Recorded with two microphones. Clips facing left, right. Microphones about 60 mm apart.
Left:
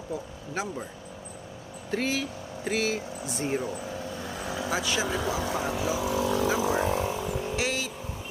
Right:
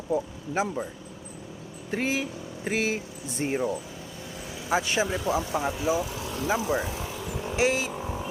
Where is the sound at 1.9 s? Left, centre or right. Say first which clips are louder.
Right 1 dB; right.